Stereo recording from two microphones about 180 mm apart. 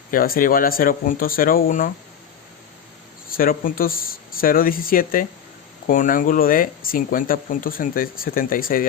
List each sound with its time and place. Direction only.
0.1 s speech: 50° left (ahead or behind)
3.2 s speech: 55° left (ahead or behind)